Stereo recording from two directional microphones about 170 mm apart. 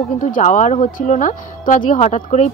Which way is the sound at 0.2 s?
45° left (ahead or behind).